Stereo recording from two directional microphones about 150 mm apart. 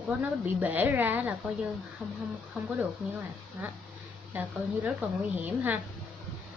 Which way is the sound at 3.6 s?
10° right (ahead or behind).